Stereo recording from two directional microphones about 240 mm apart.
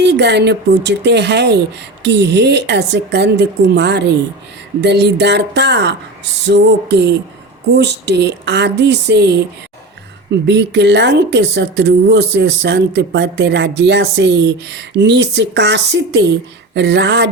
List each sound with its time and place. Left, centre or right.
0.0 s speech: right
10.4 s speech: right